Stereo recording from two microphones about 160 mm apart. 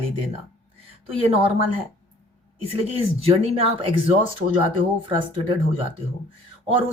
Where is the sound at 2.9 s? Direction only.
35° right (ahead or behind).